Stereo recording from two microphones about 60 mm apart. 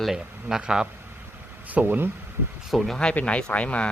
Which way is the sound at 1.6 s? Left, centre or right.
Right.